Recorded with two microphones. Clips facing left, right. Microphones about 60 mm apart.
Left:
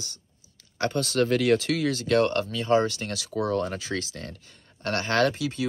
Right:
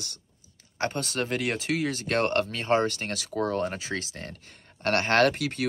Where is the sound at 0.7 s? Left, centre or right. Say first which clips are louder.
Left 5 dB; right.